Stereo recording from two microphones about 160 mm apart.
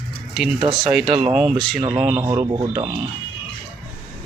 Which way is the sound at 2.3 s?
25° right (ahead or behind).